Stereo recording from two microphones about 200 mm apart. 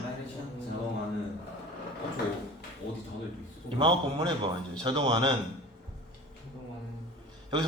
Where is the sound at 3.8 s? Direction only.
25° right (ahead or behind).